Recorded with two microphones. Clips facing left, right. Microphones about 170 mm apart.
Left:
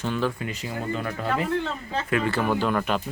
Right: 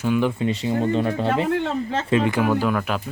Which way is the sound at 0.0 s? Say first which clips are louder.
Right 6 dB; 15° right (ahead or behind).